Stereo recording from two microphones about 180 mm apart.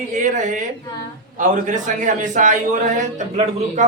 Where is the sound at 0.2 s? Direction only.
45° right (ahead or behind).